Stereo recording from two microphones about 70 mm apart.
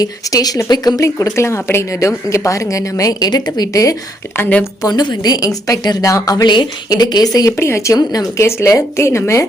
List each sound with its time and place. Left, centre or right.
0.0 s speech: left
0.9 s a woman's voice: left
4.4 s a woman's voice: left
4.8 s a woman's voice: left
6.3 s a woman's voice: left
7.5 s speech: left
7.9 s speech: left
8.4 s speech: left